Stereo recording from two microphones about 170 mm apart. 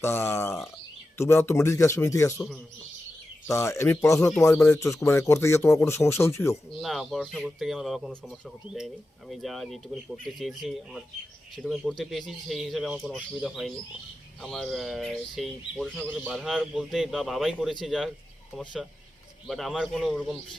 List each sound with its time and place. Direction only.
0.0 s speech: 15° left (ahead or behind)
3.4 s speech: 15° left (ahead or behind)
6.8 s speech: centre (ahead or behind)